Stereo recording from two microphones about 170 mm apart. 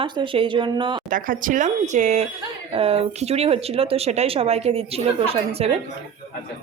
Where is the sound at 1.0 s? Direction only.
50° right (ahead or behind); by 5.7 s 35° right (ahead or behind).